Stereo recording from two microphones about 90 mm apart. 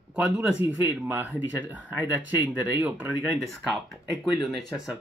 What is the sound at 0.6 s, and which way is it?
Speech, 70° left (ahead or behind).